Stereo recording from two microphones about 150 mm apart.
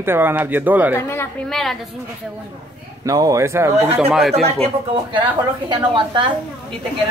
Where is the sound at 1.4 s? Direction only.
Centre (ahead or behind).